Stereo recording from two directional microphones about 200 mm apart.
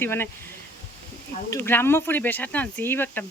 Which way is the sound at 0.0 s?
10° left (ahead or behind).